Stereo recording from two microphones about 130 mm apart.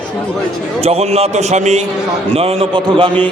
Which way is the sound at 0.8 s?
50° right (ahead or behind).